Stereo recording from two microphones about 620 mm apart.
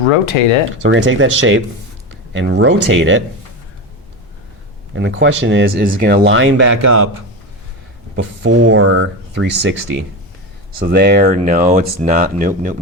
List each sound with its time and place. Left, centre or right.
0.0 s speech: left
0.8 s speech: centre
4.9 s speech: centre
8.1 s speech: centre